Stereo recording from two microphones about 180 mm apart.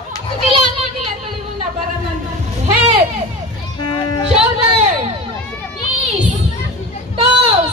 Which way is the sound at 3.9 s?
30° left (ahead or behind).